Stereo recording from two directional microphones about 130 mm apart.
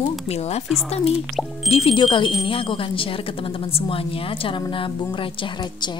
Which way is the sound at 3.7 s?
45° left (ahead or behind).